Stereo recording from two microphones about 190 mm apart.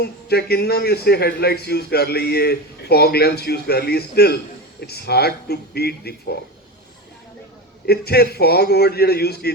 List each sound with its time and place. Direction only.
0.0 s a man's voice: 55° left (ahead or behind)
7.9 s a man's voice: 55° left (ahead or behind)